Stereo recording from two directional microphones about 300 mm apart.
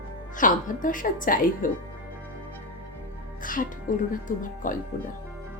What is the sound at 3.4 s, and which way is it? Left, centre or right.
Speech, left.